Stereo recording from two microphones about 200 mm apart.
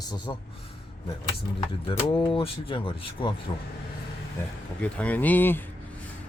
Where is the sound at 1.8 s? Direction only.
25° left (ahead or behind).